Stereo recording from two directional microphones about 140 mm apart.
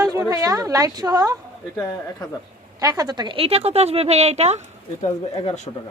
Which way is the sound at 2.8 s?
25° right (ahead or behind).